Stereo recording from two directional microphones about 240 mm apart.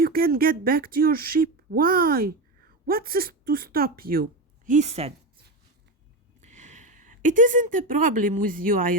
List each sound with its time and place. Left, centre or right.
0.0 s speech: right
6.4 s speech: right